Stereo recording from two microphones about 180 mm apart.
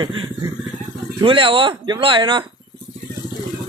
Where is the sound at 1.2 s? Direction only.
30° right (ahead or behind).